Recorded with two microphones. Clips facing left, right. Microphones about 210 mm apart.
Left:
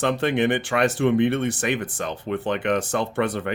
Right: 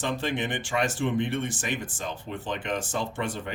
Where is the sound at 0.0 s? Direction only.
65° left (ahead or behind).